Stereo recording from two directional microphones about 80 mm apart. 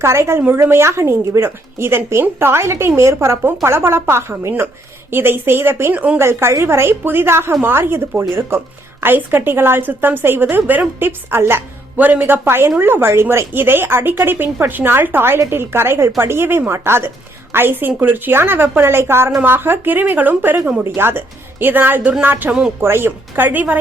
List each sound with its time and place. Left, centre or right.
0.0 s a woman's voice: right